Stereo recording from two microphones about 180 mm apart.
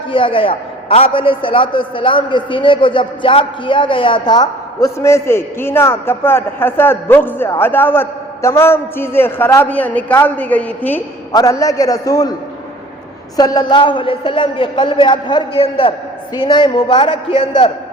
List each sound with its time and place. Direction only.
0.1 s a man's voice: 30° left (ahead or behind)
13.3 s a man's voice: 20° left (ahead or behind)